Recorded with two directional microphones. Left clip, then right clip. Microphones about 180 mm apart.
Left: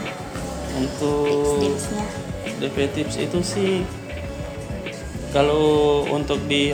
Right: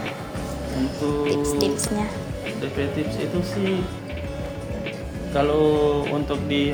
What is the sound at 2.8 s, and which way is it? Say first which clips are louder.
Speech: left 2 dB; 45° left (ahead or behind).